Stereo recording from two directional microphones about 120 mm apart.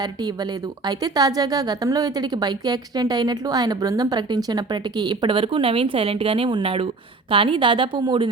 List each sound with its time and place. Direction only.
0.0 s a woman's voice: 35° right (ahead or behind)